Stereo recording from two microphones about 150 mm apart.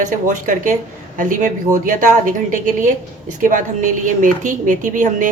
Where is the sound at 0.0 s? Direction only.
60° right (ahead or behind).